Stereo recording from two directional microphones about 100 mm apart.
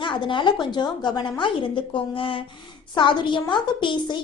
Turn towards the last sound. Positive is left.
turn(degrees=50)  # may be behind; listen again after turning